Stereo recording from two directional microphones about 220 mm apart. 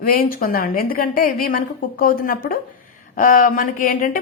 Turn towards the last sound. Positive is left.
turn(degrees=40)  # may be behind; listen again after turning